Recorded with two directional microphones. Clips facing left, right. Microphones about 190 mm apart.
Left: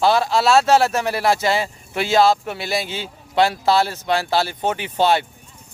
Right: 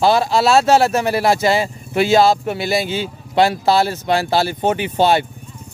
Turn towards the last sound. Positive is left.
turn(degrees=-10)  # may be behind; listen again after turning